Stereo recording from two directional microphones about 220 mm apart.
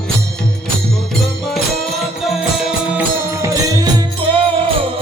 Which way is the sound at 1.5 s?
Centre (ahead or behind).